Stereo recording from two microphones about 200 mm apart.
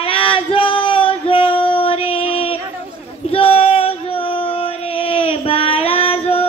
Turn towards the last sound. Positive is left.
turn(degrees=30)  # may be behind; listen again after turning